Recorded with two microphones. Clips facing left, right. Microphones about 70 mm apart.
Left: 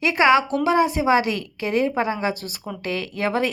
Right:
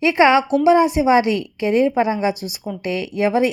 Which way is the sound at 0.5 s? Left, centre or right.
Right.